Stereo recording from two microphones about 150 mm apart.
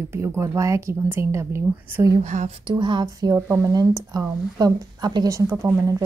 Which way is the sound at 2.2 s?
50° right (ahead or behind).